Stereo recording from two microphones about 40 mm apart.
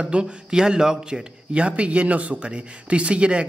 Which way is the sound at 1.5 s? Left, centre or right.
Right.